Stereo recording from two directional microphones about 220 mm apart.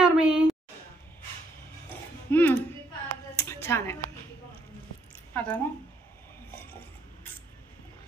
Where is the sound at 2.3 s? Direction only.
10° left (ahead or behind).